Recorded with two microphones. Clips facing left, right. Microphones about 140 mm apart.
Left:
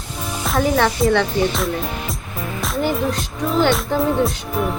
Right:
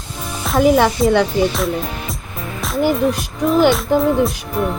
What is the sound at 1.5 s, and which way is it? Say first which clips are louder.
Speech: right 2 dB; centre (ahead or behind).